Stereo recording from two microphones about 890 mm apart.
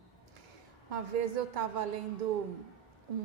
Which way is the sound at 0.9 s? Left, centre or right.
Right.